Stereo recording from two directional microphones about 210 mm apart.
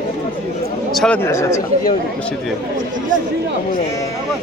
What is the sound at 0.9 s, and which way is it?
Speech, 5° left (ahead or behind).